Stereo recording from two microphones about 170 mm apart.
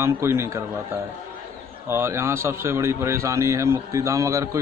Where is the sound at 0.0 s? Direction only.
15° right (ahead or behind).